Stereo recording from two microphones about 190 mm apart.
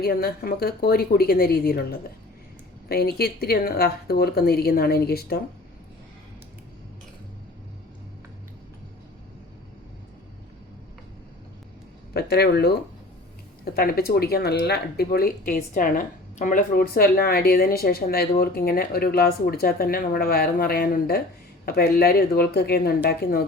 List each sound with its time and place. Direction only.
0.0 s speech: 55° left (ahead or behind)
12.1 s speech: 55° left (ahead or behind)